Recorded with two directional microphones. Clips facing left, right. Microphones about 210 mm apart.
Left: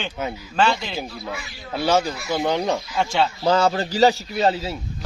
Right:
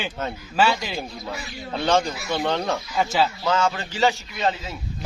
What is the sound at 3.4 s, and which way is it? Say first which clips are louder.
A man's voice: left 4 dB; 35° left (ahead or behind).